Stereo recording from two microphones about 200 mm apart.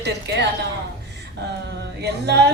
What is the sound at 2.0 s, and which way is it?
Speech, 55° right (ahead or behind).